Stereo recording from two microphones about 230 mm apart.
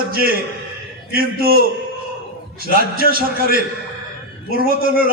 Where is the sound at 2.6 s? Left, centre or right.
Right.